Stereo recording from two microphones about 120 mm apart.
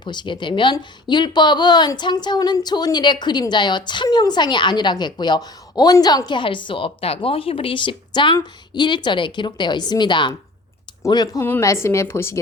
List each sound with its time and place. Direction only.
0.0 s a woman's voice: 40° left (ahead or behind); by 12.4 s 20° left (ahead or behind)